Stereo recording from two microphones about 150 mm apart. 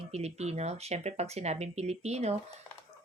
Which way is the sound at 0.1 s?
45° right (ahead or behind).